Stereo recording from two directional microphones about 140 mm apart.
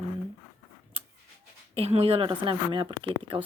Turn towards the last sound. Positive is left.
turn(degrees=-35)  # may be behind; listen again after turning